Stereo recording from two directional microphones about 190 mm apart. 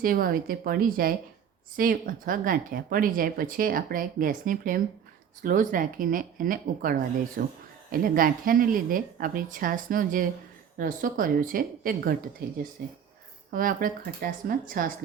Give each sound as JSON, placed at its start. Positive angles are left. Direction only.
{"t": 0.0, "sound": "speech", "side_deg": -50}
{"t": 13.5, "sound": "speech", "side_deg": -50}